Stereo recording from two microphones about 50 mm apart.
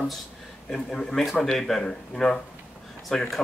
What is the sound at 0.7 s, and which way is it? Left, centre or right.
Speech, centre.